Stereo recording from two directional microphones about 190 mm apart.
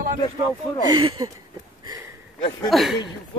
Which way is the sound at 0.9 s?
20° right (ahead or behind).